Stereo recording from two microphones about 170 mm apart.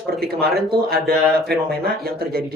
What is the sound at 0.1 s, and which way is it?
Speech, 65° right (ahead or behind).